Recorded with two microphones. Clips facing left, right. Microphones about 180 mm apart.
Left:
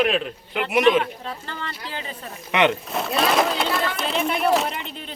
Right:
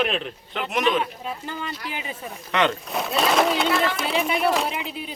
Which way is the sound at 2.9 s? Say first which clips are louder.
Left 1 dB; centre (ahead or behind).